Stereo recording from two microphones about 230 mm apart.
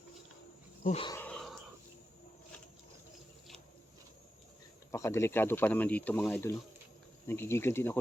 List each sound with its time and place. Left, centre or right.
0.9 s speech: left
1.1 s a sound: centre
4.9 s speech: centre